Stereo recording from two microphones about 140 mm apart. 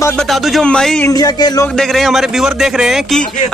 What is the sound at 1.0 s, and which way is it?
Speech, 25° left (ahead or behind).